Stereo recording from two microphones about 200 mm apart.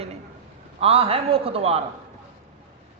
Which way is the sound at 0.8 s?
30° right (ahead or behind).